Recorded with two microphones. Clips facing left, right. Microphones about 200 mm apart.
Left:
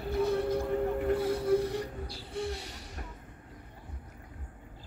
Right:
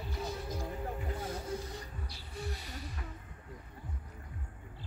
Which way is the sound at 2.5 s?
75° left (ahead or behind).